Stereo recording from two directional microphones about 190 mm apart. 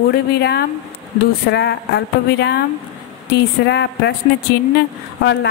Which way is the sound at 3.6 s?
65° left (ahead or behind).